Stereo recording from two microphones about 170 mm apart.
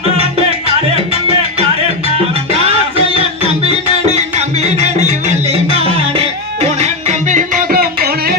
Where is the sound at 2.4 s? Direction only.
35° right (ahead or behind).